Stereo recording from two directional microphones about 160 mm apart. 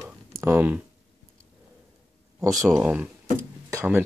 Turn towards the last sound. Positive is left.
turn(degrees=-20)  # may be behind; listen again after turning